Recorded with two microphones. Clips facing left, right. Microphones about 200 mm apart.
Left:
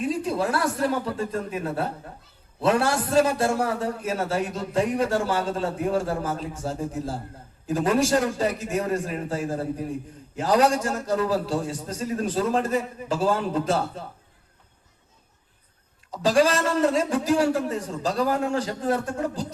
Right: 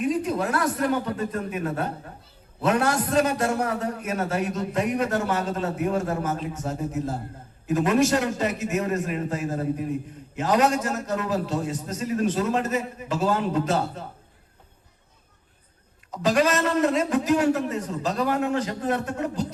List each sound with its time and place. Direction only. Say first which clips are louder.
0.0 s a woman's voice: right 1 dB; 30° left (ahead or behind)
16.2 s a man's voice: left 1 dB; 30° left (ahead or behind)